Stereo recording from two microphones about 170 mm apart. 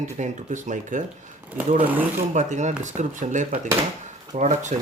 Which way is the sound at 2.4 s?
45° right (ahead or behind).